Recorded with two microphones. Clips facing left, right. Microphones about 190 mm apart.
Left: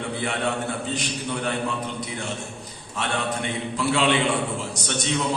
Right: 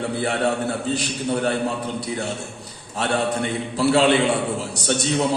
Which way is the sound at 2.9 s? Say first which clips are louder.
Right 5 dB; 35° right (ahead or behind).